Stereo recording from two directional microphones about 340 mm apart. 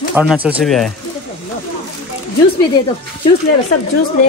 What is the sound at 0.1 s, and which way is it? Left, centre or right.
Speech, centre.